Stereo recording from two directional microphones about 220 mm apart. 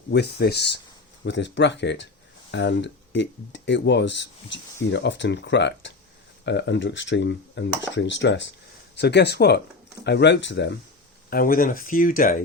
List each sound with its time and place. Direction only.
0.1 s speech: 50° left (ahead or behind)
11.3 s speech: 40° left (ahead or behind)